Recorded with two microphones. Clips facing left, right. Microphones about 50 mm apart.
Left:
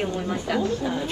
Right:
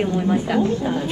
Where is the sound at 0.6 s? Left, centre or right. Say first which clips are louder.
Right 5 dB; right.